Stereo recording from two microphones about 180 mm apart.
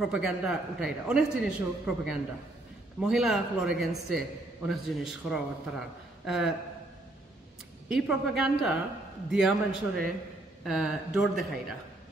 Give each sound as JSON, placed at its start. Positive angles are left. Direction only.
{"t": 0.0, "sound": "a man's voice", "side_deg": 0}
{"t": 8.1, "sound": "a man's voice", "side_deg": 0}